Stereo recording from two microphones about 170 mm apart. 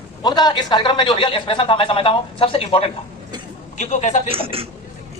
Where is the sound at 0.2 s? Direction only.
25° left (ahead or behind); by 4.2 s 45° left (ahead or behind).